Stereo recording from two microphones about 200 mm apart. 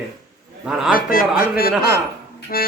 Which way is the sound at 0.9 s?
45° left (ahead or behind).